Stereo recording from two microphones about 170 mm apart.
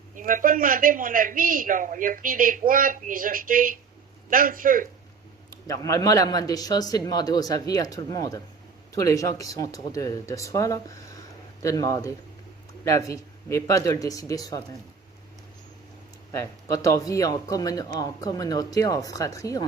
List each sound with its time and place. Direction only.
0.2 s a man's voice: 50° right (ahead or behind)
5.5 s speech: 20° left (ahead or behind)
16.3 s speech: 20° left (ahead or behind)